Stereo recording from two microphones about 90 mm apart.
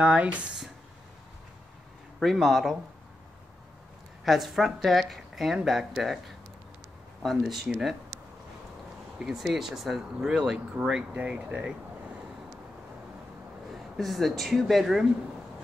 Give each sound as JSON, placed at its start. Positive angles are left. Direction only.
{"t": 0.0, "sound": "speech", "side_deg": -15}
{"t": 2.1, "sound": "speech", "side_deg": 0}
{"t": 4.2, "sound": "speech", "side_deg": 0}
{"t": 9.2, "sound": "speech", "side_deg": -5}
{"t": 13.9, "sound": "speech", "side_deg": 0}